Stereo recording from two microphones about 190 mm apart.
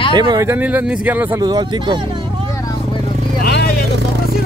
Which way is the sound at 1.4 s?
20° right (ahead or behind).